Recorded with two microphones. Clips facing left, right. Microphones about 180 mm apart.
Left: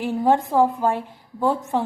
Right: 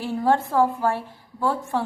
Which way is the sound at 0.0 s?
15° left (ahead or behind).